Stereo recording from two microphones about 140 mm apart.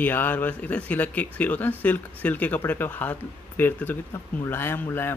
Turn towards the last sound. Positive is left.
turn(degrees=15)  # may be behind; listen again after turning